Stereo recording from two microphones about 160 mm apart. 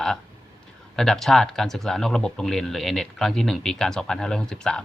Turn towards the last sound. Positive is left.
turn(degrees=5)  # may be behind; listen again after turning